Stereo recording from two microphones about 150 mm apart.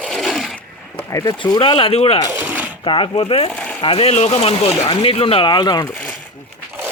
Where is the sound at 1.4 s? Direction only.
35° left (ahead or behind).